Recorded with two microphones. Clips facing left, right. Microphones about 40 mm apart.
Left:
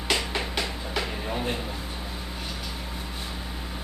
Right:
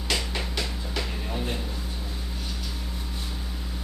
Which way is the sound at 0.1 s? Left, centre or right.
Centre.